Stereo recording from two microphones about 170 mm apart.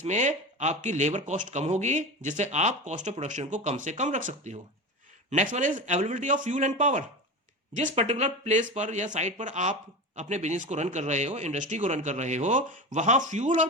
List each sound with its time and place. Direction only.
0.0 s speech: 45° right (ahead or behind)